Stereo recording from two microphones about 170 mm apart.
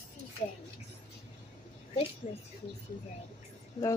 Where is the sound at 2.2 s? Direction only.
45° left (ahead or behind).